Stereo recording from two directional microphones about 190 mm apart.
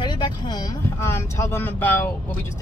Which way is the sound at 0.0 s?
25° left (ahead or behind).